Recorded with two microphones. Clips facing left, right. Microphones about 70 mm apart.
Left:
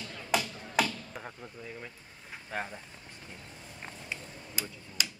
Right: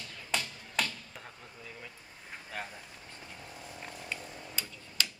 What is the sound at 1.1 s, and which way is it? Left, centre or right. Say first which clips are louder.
Speech: left 5 dB; centre.